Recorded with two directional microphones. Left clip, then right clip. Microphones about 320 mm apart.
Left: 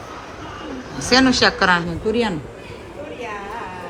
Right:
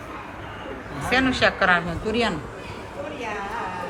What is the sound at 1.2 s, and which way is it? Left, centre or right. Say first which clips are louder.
A woman's voice: left 4 dB; centre.